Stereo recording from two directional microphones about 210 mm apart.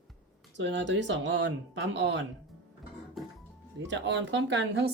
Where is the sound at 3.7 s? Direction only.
60° right (ahead or behind).